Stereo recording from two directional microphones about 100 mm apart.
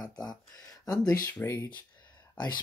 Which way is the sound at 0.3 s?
40° left (ahead or behind).